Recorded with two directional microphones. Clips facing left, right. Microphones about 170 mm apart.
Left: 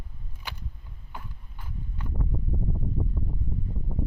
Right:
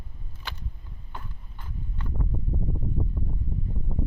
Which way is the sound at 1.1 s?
10° left (ahead or behind).